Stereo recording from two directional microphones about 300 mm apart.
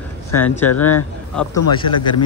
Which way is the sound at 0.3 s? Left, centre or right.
Centre.